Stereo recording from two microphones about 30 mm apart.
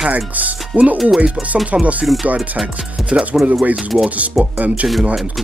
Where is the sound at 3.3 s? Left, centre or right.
Centre.